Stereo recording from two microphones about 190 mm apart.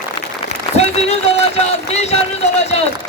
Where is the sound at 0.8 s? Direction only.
35° left (ahead or behind).